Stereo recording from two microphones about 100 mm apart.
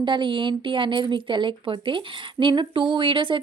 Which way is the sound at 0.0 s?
50° right (ahead or behind).